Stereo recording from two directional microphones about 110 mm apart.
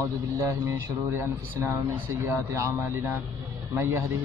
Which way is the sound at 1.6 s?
25° right (ahead or behind).